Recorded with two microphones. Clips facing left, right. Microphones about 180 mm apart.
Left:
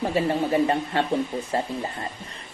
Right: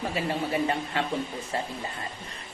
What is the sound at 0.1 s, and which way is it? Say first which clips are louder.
Speech: left 7 dB; 30° left (ahead or behind).